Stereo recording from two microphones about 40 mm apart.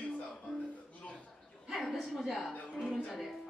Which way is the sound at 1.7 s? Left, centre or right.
Centre.